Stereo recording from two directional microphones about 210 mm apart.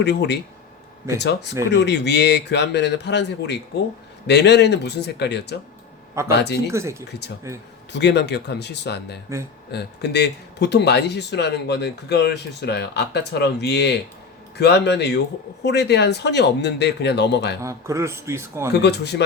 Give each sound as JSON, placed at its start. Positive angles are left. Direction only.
{"t": 0.0, "sound": "speech", "side_deg": 55}
{"t": 6.7, "sound": "speech", "side_deg": -15}
{"t": 7.9, "sound": "speech", "side_deg": 55}
{"t": 17.6, "sound": "speech", "side_deg": -15}
{"t": 18.7, "sound": "speech", "side_deg": 55}